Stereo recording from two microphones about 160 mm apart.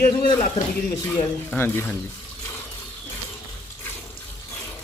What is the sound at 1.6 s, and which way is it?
Speech, 15° left (ahead or behind).